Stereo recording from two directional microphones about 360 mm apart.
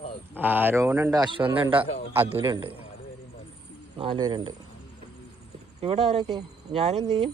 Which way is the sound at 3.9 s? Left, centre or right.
Centre.